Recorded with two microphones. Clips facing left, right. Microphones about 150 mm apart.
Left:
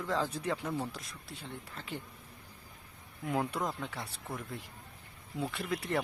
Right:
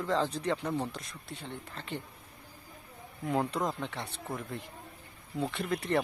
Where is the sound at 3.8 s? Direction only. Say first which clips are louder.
Right 3 dB; centre (ahead or behind).